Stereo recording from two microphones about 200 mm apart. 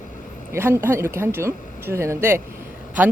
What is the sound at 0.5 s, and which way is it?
A woman's voice, 10° right (ahead or behind).